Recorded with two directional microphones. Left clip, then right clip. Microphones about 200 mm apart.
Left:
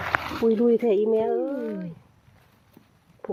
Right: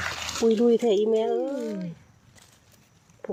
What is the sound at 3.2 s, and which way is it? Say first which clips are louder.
Stomach rumble: left 1 dB; 5° right (ahead or behind).